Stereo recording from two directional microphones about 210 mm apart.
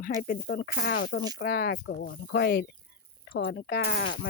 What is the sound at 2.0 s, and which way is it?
Speech, 60° left (ahead or behind).